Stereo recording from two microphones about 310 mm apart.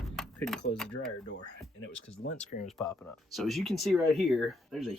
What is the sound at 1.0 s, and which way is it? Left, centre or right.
Speech, left.